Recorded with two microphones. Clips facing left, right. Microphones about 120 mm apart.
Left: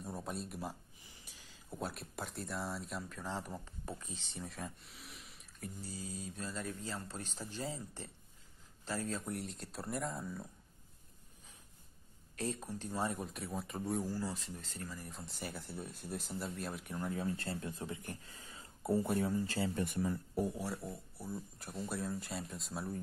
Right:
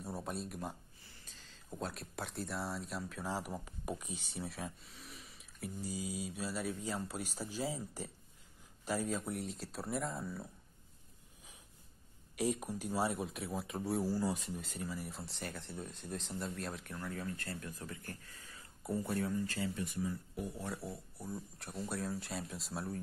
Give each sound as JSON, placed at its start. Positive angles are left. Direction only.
{"t": 0.0, "sound": "speech", "side_deg": 0}
{"t": 1.0, "sound": "speech", "side_deg": 15}
{"t": 5.8, "sound": "speech", "side_deg": -10}
{"t": 9.3, "sound": "speech", "side_deg": 0}
{"t": 12.4, "sound": "speech", "side_deg": -10}
{"t": 16.9, "sound": "speech", "side_deg": 20}
{"t": 19.7, "sound": "speech", "side_deg": 55}
{"t": 20.5, "sound": "speech", "side_deg": 5}